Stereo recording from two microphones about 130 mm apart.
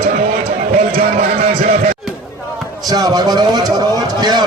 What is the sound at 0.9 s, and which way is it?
Speech, 90° right.